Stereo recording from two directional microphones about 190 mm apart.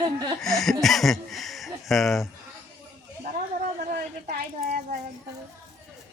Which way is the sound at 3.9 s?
55° right (ahead or behind).